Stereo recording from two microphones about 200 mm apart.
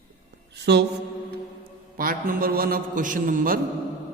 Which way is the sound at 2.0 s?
45° right (ahead or behind).